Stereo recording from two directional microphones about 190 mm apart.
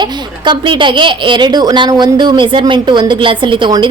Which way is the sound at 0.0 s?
25° right (ahead or behind).